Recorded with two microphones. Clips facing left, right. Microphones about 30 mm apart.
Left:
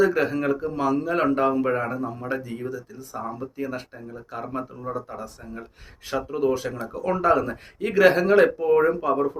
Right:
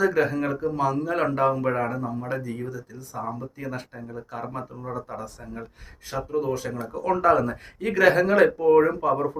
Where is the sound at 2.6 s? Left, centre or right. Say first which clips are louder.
Left 3 dB; left.